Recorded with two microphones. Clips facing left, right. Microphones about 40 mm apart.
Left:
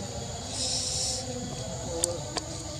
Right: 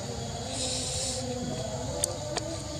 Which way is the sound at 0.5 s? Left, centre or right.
Right.